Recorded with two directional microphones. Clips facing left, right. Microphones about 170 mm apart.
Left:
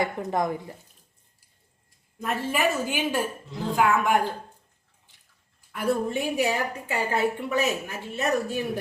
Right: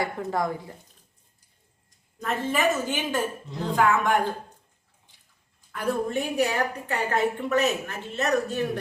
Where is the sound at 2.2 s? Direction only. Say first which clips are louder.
Right 1 dB; 10° left (ahead or behind).